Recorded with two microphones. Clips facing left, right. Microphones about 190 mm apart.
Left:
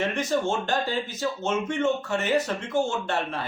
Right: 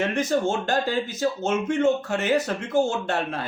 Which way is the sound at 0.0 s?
40° right (ahead or behind).